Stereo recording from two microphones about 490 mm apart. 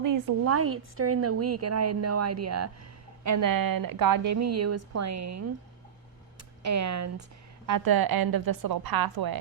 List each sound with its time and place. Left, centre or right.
0.0 s a woman's voice: right
6.7 s a woman's voice: right
7.7 s a woman's voice: right